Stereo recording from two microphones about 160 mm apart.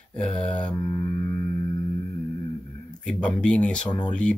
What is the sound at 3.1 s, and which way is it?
Speech, 5° left (ahead or behind).